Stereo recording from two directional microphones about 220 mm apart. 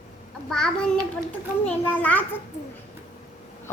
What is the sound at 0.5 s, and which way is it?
A child's voice, 5° left (ahead or behind).